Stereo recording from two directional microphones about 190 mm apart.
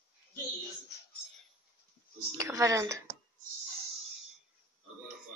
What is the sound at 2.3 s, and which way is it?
Speech, 15° right (ahead or behind).